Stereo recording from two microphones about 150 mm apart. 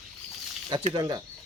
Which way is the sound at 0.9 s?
30° right (ahead or behind).